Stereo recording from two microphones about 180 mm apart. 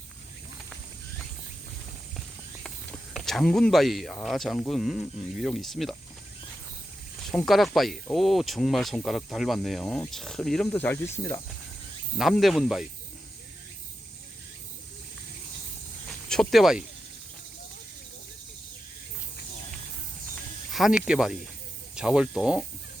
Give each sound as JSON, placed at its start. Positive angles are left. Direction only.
{"t": 2.6, "sound": "speech", "side_deg": 0}
{"t": 7.3, "sound": "speech", "side_deg": 0}
{"t": 12.1, "sound": "speech", "side_deg": 0}
{"t": 16.3, "sound": "speech", "side_deg": 0}
{"t": 20.7, "sound": "speech", "side_deg": -5}